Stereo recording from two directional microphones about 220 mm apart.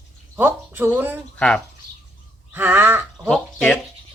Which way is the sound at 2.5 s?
10° right (ahead or behind).